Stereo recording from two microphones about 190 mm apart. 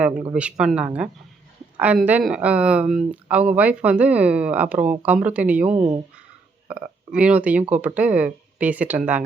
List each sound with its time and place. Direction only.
0.0 s speech: 5° right (ahead or behind)
5.7 s speech: 20° right (ahead or behind)
6.7 s speech: 10° right (ahead or behind)